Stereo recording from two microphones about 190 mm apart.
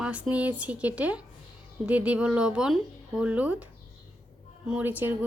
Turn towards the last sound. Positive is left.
turn(degrees=-10)  # may be behind; listen again after turning